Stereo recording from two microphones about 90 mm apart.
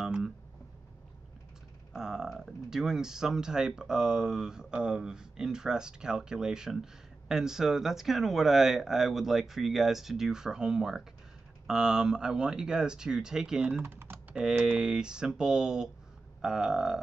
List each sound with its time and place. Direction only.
0.0 s a sound: 5° right (ahead or behind)
2.0 s speech: 5° right (ahead or behind)
13.8 s typing: 25° right (ahead or behind)
14.3 s speech: 10° right (ahead or behind)